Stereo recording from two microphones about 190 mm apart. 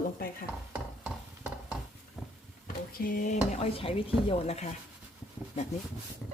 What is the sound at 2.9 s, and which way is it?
Speech, 50° left (ahead or behind).